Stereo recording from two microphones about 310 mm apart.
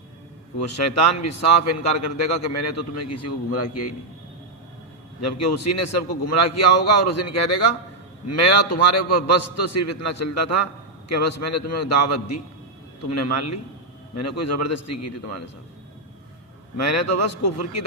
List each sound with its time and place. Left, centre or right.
0.6 s a man's voice: left
5.2 s a man's voice: left
8.9 s a man's voice: left
16.7 s a man's voice: left